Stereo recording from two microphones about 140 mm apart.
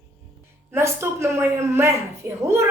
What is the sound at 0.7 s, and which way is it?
A man's voice, 20° right (ahead or behind).